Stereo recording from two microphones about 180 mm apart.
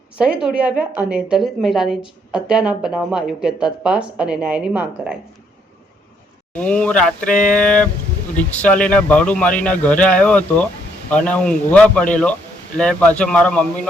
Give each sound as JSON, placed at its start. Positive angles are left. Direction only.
{"t": 0.2, "sound": "a woman's voice", "side_deg": -5}
{"t": 6.5, "sound": "speech", "side_deg": 5}
{"t": 7.3, "sound": "a sound", "side_deg": 45}
{"t": 7.5, "sound": "a woman's voice", "side_deg": 5}